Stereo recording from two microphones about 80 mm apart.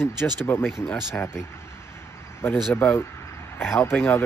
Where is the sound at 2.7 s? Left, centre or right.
Left.